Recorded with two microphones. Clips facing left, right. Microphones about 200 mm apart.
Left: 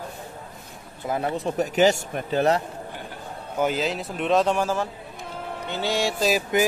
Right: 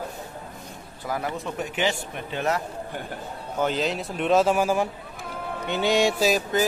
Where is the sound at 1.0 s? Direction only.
25° left (ahead or behind).